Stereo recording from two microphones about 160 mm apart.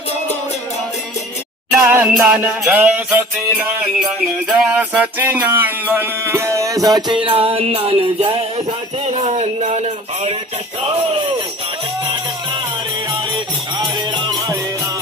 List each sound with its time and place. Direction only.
1.8 s music: 10° right (ahead or behind); by 10.3 s 40° right (ahead or behind)
13.7 s music: 25° right (ahead or behind)